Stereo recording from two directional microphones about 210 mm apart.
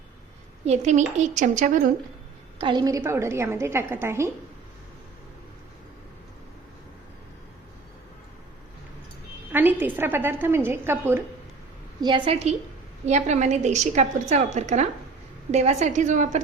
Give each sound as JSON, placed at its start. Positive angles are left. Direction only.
{"t": 0.6, "sound": "a woman's voice", "side_deg": -35}
{"t": 2.6, "sound": "a woman's voice", "side_deg": -20}
{"t": 9.5, "sound": "a woman's voice", "side_deg": -10}
{"t": 11.9, "sound": "a woman's voice", "side_deg": -20}